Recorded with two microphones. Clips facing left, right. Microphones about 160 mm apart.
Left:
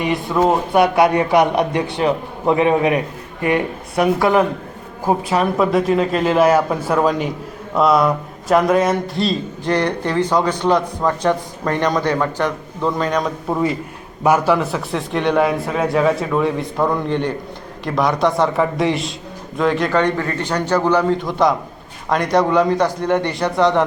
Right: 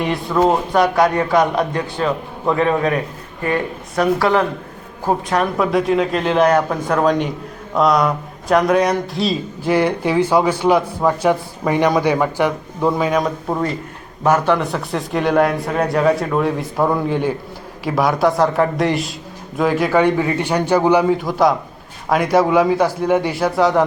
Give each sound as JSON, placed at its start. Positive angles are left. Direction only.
{"t": 0.0, "sound": "a man's voice", "side_deg": 5}
{"t": 14.3, "sound": "a man's voice", "side_deg": 10}